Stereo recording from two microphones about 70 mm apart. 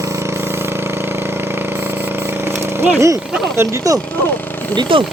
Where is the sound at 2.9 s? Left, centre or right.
Right.